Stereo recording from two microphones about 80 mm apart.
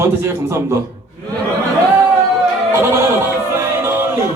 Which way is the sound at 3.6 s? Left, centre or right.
Right.